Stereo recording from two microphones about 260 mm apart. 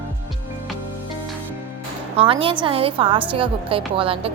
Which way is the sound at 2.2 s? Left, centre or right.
Centre.